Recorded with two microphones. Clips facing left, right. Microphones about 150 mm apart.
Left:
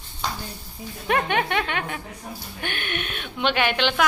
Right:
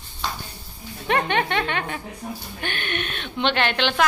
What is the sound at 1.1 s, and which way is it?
A woman's voice, 5° left (ahead or behind).